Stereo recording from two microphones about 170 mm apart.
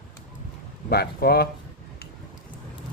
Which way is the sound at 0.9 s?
65° left (ahead or behind).